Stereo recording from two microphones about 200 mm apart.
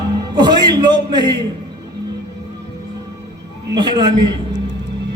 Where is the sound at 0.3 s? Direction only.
20° right (ahead or behind).